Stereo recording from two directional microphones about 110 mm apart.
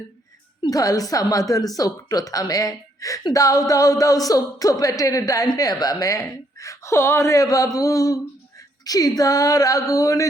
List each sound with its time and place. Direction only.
0.6 s a woman's voice: 35° left (ahead or behind)
8.5 s female singing: 35° left (ahead or behind)
9.9 s speech: 30° left (ahead or behind)